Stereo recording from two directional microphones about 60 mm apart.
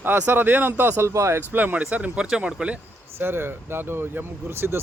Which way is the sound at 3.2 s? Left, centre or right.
Right.